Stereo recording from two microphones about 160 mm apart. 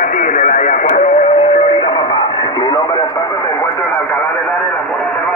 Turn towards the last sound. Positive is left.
turn(degrees=20)  # may be behind; listen again after turning